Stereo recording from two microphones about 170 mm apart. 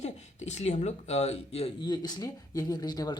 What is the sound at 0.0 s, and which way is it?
Speech, 40° left (ahead or behind).